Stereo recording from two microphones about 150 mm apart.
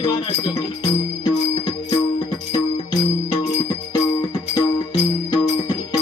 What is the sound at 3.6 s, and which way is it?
Music, 35° left (ahead or behind).